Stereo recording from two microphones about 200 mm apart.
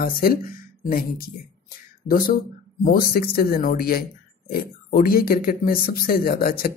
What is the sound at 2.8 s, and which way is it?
Speech, 50° left (ahead or behind).